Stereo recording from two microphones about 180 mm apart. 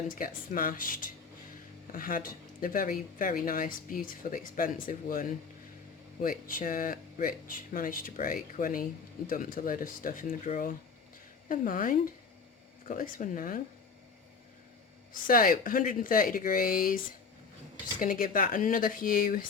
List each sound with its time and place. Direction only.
0.1 s speech: 50° left (ahead or behind)
6.5 s speech: 50° left (ahead or behind)
15.1 s speech: 50° left (ahead or behind)
18.0 s speech: 50° left (ahead or behind)